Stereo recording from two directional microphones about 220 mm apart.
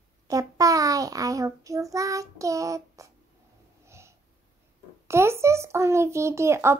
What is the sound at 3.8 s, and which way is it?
Snort, 10° right (ahead or behind).